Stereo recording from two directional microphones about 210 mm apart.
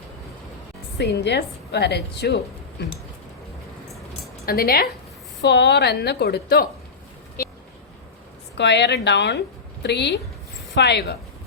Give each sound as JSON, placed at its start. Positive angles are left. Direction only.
{"t": 0.9, "sound": "a woman's voice", "side_deg": 50}
{"t": 4.4, "sound": "a woman's voice", "side_deg": 45}
{"t": 8.5, "sound": "a woman's voice", "side_deg": 55}